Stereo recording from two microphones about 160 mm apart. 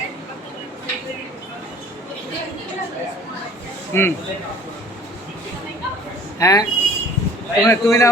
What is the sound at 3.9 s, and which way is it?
Speech, 15° left (ahead or behind).